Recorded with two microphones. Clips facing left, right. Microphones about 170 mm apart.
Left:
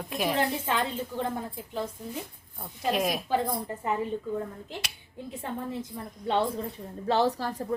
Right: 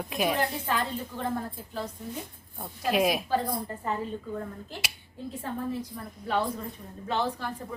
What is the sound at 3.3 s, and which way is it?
Speech, 20° left (ahead or behind).